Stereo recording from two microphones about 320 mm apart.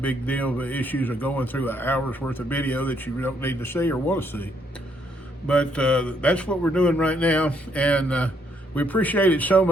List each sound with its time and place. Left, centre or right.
0.0 s a man's voice: centre
5.5 s a man's voice: centre